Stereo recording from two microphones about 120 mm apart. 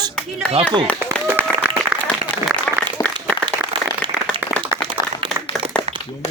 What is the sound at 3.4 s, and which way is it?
Clapping, 40° right (ahead or behind).